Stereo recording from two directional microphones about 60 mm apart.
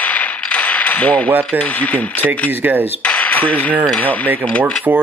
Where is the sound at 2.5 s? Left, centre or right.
Right.